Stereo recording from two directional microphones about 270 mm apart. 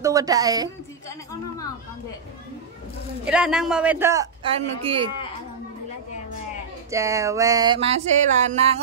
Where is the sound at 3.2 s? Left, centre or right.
Centre.